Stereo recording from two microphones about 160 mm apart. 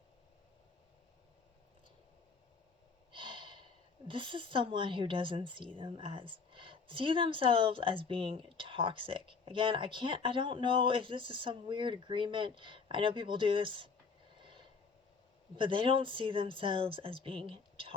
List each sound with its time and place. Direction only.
3.1 s speech: 30° right (ahead or behind)
15.5 s speech: 30° right (ahead or behind)